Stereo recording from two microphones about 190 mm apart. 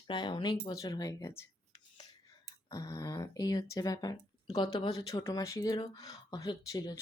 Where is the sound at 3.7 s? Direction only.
20° left (ahead or behind).